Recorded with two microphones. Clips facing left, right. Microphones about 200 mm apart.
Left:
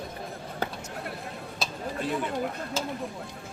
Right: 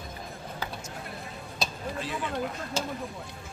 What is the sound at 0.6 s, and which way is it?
Basketball bounce, 65° left (ahead or behind).